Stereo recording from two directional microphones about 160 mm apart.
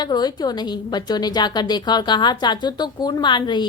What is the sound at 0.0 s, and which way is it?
A woman's voice, 25° left (ahead or behind).